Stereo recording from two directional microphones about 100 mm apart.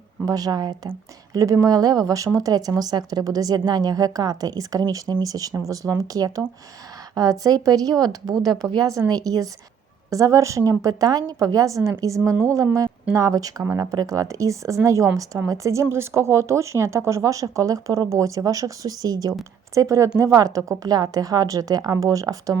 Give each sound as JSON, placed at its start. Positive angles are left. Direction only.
{"t": 0.3, "sound": "a woman's voice", "side_deg": -40}
{"t": 13.6, "sound": "speech", "side_deg": -25}
{"t": 13.9, "sound": "a woman's voice", "side_deg": -35}